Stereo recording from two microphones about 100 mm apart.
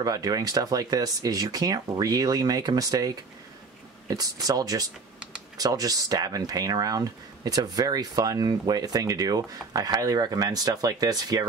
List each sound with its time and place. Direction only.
0.0 s speech: 40° right (ahead or behind)